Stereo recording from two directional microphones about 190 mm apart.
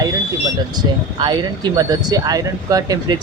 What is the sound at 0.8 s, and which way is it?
Speech, 25° right (ahead or behind).